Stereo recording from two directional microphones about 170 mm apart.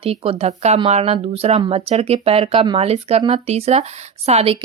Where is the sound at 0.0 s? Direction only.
35° right (ahead or behind).